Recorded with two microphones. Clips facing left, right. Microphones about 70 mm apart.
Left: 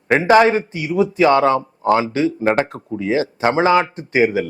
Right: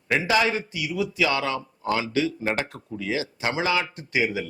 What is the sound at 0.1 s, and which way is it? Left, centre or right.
Speech, left.